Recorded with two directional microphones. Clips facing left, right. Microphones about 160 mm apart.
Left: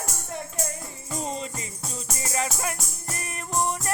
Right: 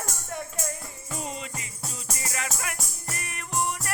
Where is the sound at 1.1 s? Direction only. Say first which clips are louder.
Left 4 dB; 35° left (ahead or behind).